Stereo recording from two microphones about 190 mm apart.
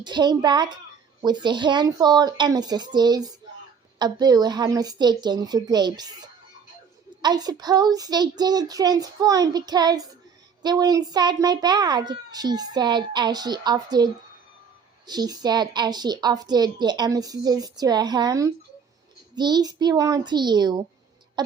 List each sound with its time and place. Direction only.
0.0 s a child's voice: 25° right (ahead or behind)